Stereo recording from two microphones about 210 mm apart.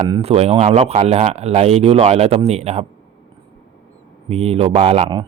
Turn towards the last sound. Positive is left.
turn(degrees=-25)  # may be behind; listen again after turning